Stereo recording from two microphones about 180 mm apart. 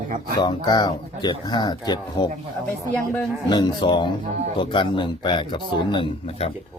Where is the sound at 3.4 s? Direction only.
25° left (ahead or behind).